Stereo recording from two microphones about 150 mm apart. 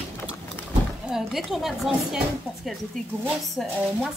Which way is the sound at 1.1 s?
Centre (ahead or behind).